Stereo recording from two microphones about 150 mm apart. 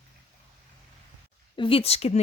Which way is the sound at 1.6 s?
40° left (ahead or behind).